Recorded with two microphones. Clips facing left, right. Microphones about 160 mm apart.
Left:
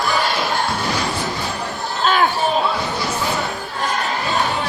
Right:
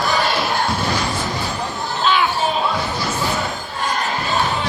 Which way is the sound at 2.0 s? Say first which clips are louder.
Left 1 dB; 45° left (ahead or behind).